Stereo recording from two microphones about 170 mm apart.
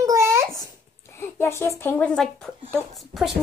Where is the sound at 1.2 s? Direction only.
15° left (ahead or behind).